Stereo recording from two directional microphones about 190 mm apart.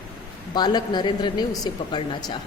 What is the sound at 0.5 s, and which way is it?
Speech, 20° left (ahead or behind).